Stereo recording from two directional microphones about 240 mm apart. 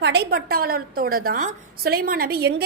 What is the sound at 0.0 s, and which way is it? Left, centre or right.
A woman's voice, right.